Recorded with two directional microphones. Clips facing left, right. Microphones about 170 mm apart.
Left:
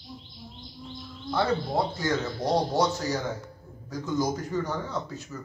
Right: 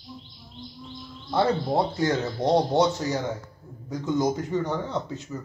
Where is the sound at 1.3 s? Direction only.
25° right (ahead or behind).